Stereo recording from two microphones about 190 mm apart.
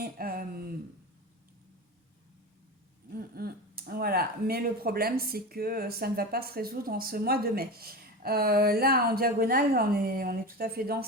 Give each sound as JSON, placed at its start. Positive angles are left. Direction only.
{"t": 0.0, "sound": "speech", "side_deg": -50}
{"t": 3.1, "sound": "speech", "side_deg": -50}